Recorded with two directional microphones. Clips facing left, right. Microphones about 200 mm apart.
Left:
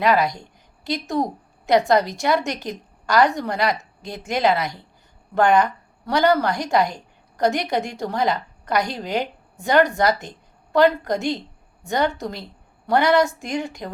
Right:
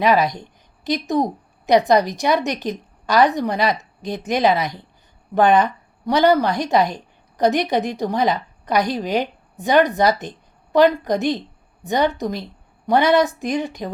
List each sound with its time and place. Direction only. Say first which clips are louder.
0.0 s a woman's voice: right 2 dB; 20° right (ahead or behind)